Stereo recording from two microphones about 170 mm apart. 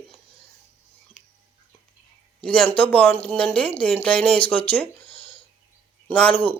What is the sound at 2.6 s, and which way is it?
Speech, 10° left (ahead or behind).